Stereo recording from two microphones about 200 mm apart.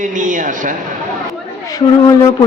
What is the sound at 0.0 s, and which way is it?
Speech, 40° right (ahead or behind).